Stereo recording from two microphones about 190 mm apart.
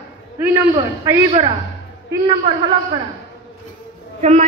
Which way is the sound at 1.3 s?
30° right (ahead or behind).